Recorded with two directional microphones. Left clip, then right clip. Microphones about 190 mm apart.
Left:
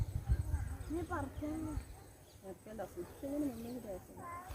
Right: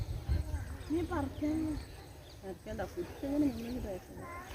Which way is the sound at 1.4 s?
Centre (ahead or behind).